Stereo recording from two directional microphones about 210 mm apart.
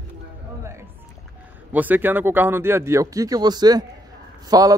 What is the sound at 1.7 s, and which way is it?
Speech, 10° right (ahead or behind).